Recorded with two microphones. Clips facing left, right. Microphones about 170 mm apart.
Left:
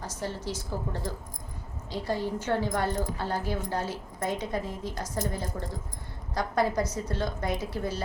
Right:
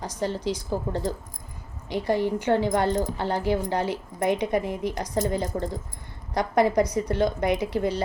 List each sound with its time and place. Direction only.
0.0 s a woman's voice: 15° right (ahead or behind)
3.2 s speech: 75° right (ahead or behind)
4.3 s a woman's voice: 15° right (ahead or behind)
7.4 s speech: 70° right (ahead or behind)